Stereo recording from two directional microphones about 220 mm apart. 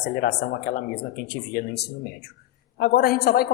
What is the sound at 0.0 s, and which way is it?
A man's voice, 50° left (ahead or behind).